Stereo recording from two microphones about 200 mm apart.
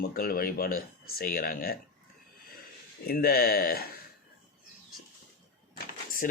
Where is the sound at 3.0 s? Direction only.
50° left (ahead or behind).